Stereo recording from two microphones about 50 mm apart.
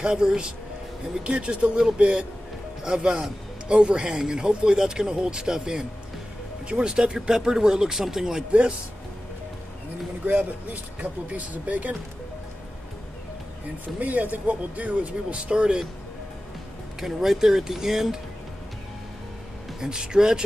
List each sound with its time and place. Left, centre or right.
0.0 s a man's voice: centre
8.5 s speech: right
10.2 s speech: right
13.9 s speech: right
17.0 s a man's voice: centre
19.8 s a man's voice: centre